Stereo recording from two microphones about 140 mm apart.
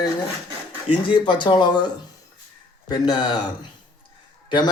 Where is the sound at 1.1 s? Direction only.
35° left (ahead or behind).